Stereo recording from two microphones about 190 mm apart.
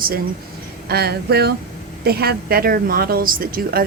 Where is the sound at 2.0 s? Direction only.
55° right (ahead or behind).